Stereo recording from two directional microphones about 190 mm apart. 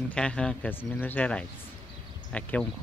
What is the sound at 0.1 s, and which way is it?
Speech, 5° left (ahead or behind).